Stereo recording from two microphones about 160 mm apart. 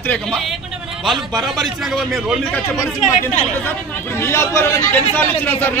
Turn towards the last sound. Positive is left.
turn(degrees=10)  # may be behind; listen again after turning